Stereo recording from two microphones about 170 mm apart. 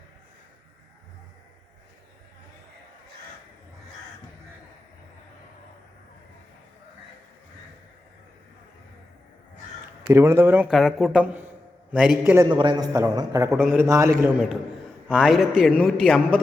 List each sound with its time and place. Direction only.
10.1 s a man's voice: 15° right (ahead or behind)
10.7 s a man's voice: centre (ahead or behind)
12.2 s a man's voice: 15° right (ahead or behind)
12.5 s a man's voice: 25° right (ahead or behind); by 14.4 s 10° right (ahead or behind)
15.0 s a man's voice: centre (ahead or behind)